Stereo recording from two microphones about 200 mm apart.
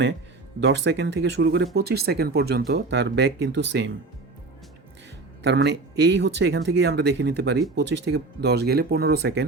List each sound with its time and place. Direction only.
0.6 s speech: 60° right (ahead or behind)
5.4 s speech: 60° right (ahead or behind)